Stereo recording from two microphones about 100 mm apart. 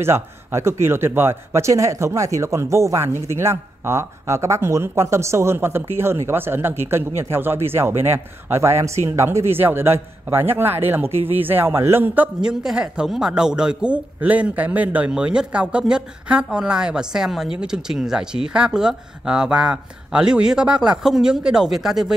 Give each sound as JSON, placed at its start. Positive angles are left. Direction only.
{"t": 0.0, "sound": "speech", "side_deg": -25}